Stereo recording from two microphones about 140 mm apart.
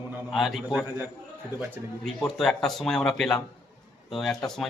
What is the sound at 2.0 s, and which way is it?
Speech, 5° left (ahead or behind).